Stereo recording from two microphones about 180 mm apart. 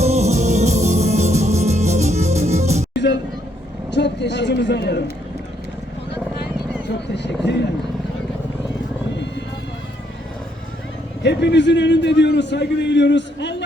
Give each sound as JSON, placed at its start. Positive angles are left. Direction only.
{"t": 0.0, "sound": "music", "side_deg": -40}
{"t": 2.9, "sound": "vehicle", "side_deg": 75}
{"t": 3.9, "sound": "a sound", "side_deg": 75}
{"t": 7.1, "sound": "vehicle", "side_deg": 70}
{"t": 11.2, "sound": "a man's voice", "side_deg": 70}